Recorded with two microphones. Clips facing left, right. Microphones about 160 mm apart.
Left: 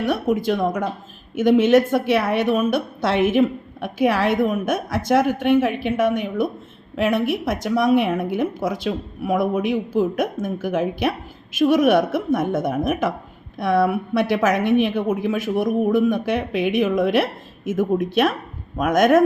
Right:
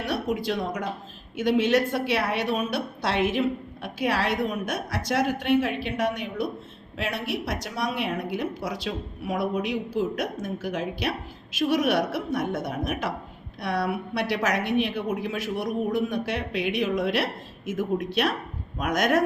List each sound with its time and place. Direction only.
0.0 s a woman's voice: 50° left (ahead or behind)